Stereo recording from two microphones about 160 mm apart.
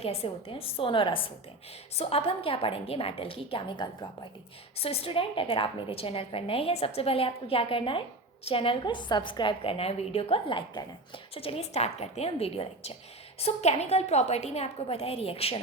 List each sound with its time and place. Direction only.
0.0 s a woman's voice: 40° left (ahead or behind)